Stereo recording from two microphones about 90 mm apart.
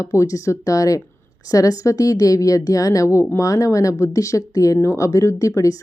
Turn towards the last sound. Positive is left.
turn(degrees=35)  # may be behind; listen again after turning